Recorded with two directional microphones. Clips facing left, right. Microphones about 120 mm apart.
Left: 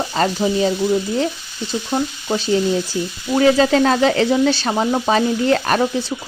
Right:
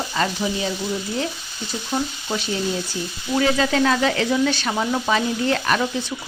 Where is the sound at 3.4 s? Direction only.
35° left (ahead or behind).